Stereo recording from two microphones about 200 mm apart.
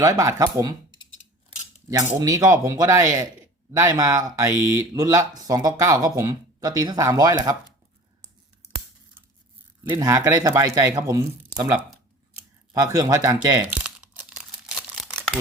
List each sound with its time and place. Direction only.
0.0 s speech: 15° right (ahead or behind)
2.1 s speech: 15° right (ahead or behind)
9.9 s speech: 15° right (ahead or behind)
13.6 s crumpling: 5° right (ahead or behind)